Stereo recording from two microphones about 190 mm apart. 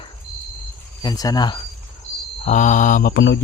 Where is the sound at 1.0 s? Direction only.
20° left (ahead or behind).